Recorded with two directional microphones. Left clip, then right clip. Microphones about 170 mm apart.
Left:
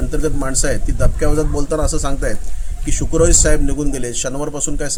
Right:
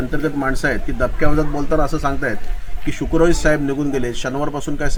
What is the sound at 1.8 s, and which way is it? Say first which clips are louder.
A man's voice: right 1 dB; 35° left (ahead or behind).